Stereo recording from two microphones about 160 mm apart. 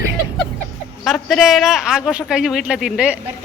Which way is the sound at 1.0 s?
Centre (ahead or behind).